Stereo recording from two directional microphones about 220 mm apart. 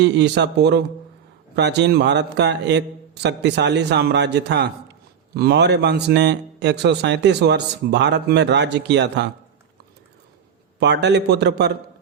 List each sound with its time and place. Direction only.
0.0 s a man's voice: 50° right (ahead or behind)
10.8 s a man's voice: 50° right (ahead or behind)